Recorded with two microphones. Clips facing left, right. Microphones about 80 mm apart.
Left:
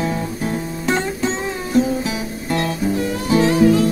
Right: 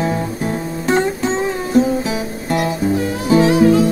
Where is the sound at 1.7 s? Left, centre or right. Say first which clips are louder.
Right 2 dB; right.